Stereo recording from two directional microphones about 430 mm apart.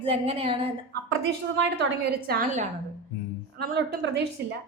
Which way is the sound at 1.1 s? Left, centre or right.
Right.